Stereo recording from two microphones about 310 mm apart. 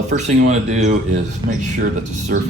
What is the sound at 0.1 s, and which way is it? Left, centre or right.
Speech, right.